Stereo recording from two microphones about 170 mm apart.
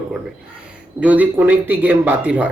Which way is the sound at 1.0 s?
10° right (ahead or behind).